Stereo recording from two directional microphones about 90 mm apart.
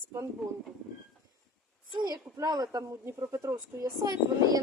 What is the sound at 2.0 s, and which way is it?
Speech, 50° right (ahead or behind).